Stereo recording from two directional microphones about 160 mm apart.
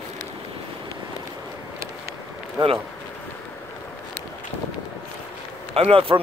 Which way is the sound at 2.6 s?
25° right (ahead or behind).